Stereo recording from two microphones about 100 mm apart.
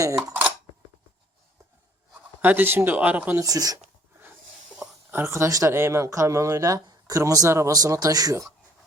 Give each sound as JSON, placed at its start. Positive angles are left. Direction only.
{"t": 2.4, "sound": "speech", "side_deg": -20}
{"t": 3.3, "sound": "speech", "side_deg": -35}
{"t": 5.1, "sound": "speech", "side_deg": -30}